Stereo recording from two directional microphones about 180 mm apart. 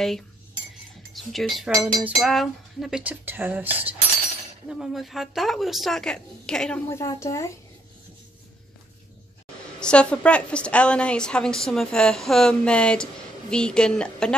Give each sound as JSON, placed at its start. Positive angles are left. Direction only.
{"t": 1.1, "sound": "a woman's voice", "side_deg": 0}
{"t": 7.0, "sound": "speech", "side_deg": 15}
{"t": 9.8, "sound": "a woman's voice", "side_deg": 5}